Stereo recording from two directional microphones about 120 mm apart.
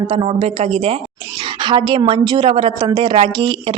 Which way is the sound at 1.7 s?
45° right (ahead or behind).